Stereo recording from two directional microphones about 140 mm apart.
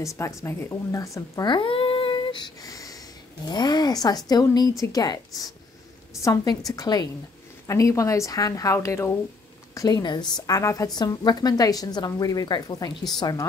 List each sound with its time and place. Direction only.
0.2 s a woman's voice: 20° left (ahead or behind)